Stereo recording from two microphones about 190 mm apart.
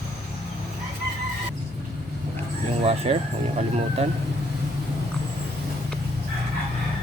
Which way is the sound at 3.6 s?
35° right (ahead or behind).